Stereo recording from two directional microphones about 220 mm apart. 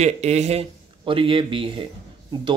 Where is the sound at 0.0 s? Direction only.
30° right (ahead or behind).